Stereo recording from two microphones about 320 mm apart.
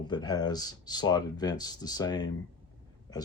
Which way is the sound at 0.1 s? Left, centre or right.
Centre.